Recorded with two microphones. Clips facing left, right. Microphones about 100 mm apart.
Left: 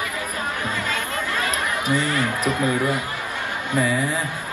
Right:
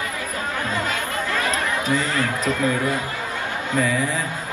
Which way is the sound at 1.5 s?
15° left (ahead or behind).